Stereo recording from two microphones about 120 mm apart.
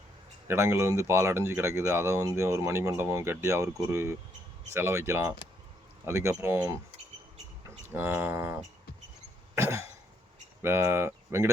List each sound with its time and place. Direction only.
0.4 s speech: 20° right (ahead or behind)
7.9 s speech: 15° right (ahead or behind)
9.6 s speech: 20° right (ahead or behind)